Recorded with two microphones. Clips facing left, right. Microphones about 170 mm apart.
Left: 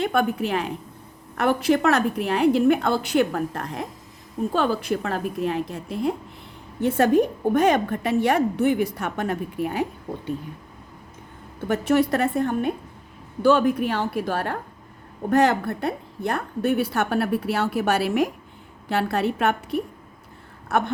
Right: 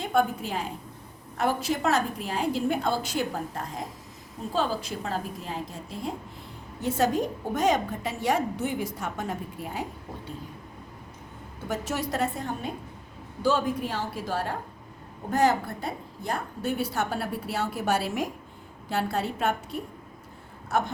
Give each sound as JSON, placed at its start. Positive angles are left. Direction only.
{"t": 0.0, "sound": "a woman's voice", "side_deg": 70}
{"t": 11.7, "sound": "a woman's voice", "side_deg": 60}